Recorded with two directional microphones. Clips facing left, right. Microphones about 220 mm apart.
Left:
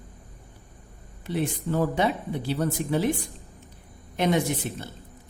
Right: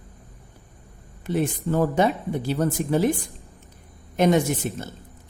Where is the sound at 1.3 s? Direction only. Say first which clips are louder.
Right 3 dB; 45° right (ahead or behind).